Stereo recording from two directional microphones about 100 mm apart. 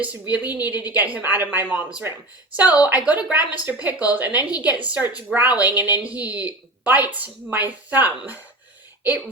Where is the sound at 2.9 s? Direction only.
15° right (ahead or behind).